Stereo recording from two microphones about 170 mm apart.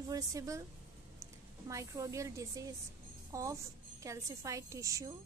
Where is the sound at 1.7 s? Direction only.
20° right (ahead or behind).